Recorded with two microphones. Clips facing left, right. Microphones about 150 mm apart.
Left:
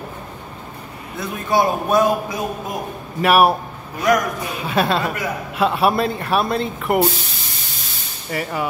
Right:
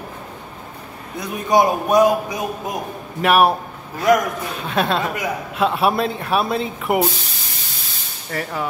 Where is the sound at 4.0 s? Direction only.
25° right (ahead or behind).